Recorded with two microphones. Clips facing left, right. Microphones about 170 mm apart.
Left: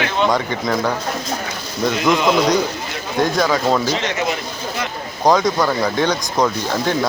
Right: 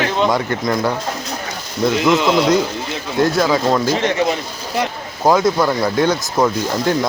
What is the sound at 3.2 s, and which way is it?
Speech, 5° right (ahead or behind).